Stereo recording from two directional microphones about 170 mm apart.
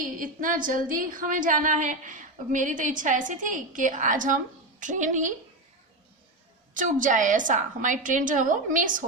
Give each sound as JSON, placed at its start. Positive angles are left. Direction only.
{"t": 0.2, "sound": "a woman's voice", "side_deg": -50}
{"t": 6.7, "sound": "a woman's voice", "side_deg": -50}